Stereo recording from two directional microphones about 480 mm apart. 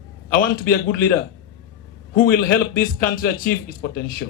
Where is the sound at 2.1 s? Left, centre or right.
Centre.